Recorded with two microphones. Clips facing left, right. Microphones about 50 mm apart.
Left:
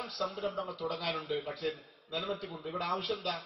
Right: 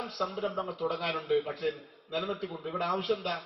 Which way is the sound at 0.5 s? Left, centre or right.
Right.